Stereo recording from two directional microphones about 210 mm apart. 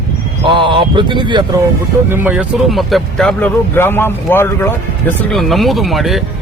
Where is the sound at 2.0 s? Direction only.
10° right (ahead or behind).